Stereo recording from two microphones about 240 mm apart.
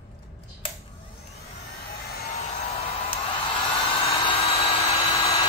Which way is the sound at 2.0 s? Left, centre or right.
Left.